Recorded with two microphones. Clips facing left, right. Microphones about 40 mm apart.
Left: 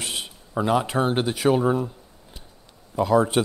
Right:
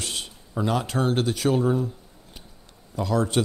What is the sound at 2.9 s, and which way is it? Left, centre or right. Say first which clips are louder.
Speech: left 5 dB; centre.